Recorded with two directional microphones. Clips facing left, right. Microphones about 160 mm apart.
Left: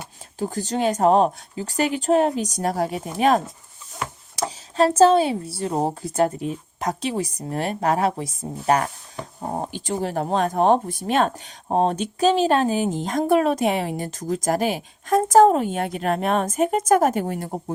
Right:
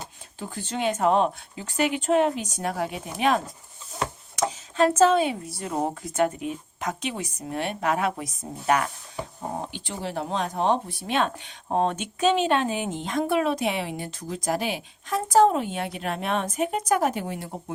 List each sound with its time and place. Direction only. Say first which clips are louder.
0.3 s a woman's voice: left 7 dB; 40° left (ahead or behind)